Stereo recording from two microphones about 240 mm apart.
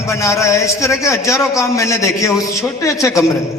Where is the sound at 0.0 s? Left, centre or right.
Centre.